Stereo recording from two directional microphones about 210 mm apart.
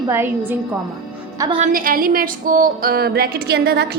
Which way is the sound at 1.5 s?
40° right (ahead or behind).